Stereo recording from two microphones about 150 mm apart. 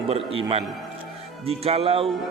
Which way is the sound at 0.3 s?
40° right (ahead or behind).